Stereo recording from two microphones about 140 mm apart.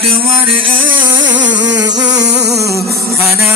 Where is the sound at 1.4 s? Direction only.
30° right (ahead or behind).